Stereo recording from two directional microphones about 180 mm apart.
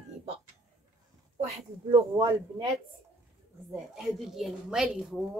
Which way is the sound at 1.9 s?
25° right (ahead or behind).